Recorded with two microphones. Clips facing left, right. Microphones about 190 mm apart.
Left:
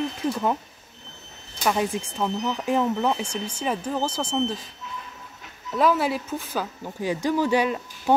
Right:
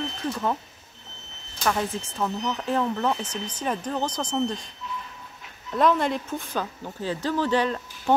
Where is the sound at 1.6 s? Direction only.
15° left (ahead or behind).